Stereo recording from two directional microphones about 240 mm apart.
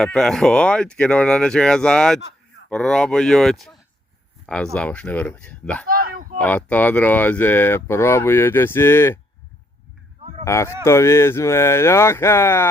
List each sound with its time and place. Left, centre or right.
0.0 s speech: centre
5.9 s a sound: right
6.4 s speech: centre
10.4 s speech: centre